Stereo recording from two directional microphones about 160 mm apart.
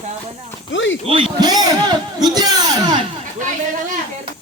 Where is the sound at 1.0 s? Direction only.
30° right (ahead or behind).